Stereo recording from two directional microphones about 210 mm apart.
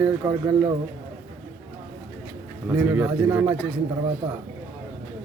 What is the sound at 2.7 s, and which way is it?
Speech, 10° right (ahead or behind).